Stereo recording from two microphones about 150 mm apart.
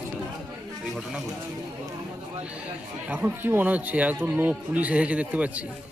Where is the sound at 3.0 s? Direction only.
10° right (ahead or behind).